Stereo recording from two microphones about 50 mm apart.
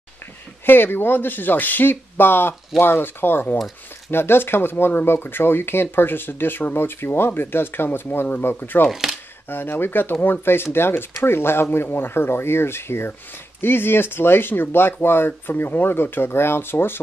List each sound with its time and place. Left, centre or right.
0.7 s speech: left